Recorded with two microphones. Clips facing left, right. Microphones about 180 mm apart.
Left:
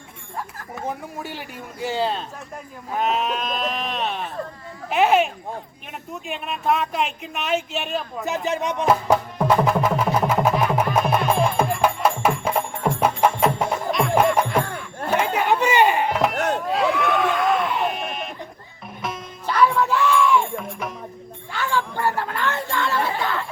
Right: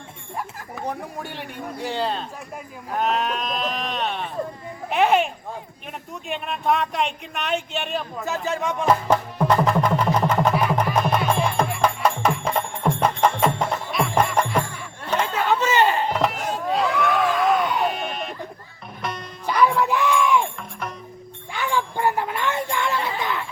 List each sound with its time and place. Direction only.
0.8 s speech: centre (ahead or behind)
8.2 s speech: 20° left (ahead or behind)
8.9 s music: 5° left (ahead or behind)
15.1 s chatter: 10° left (ahead or behind)
15.6 s a sound: 15° left (ahead or behind)
16.3 s chop: 65° left (ahead or behind)
16.6 s a sound: centre (ahead or behind)
19.0 s music: 5° left (ahead or behind)
19.5 s music: 15° right (ahead or behind)
19.8 s a sound: 15° right (ahead or behind)
20.6 s music: centre (ahead or behind)
21.5 s a sound: 15° right (ahead or behind)